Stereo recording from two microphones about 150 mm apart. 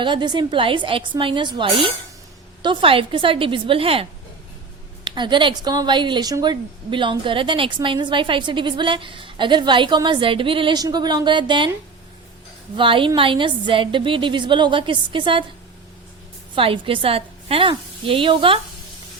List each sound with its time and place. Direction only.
0.0 s a woman's voice: 30° right (ahead or behind)
5.0 s a woman's voice: 30° right (ahead or behind)
12.7 s a woman's voice: 35° right (ahead or behind)
16.6 s a woman's voice: 35° right (ahead or behind)